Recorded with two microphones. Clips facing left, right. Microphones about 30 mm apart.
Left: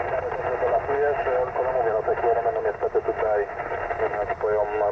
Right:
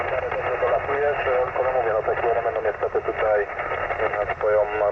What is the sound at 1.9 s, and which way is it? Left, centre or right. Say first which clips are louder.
Radio: even; right.